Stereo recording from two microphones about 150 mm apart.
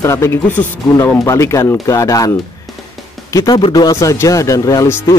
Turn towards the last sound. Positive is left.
turn(degrees=25)  # may be behind; listen again after turning